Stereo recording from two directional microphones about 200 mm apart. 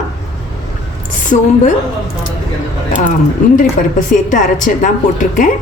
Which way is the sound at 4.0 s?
40° left (ahead or behind).